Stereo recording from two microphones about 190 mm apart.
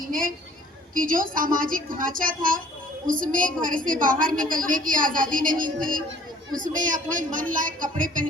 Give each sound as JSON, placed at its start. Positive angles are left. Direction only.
{"t": 0.9, "sound": "speech", "side_deg": -45}